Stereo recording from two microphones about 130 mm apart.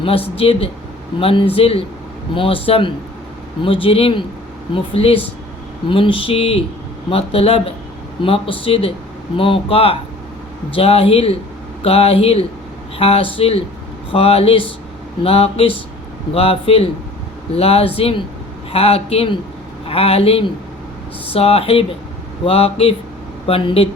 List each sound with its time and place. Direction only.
0.3 s speech: 45° left (ahead or behind)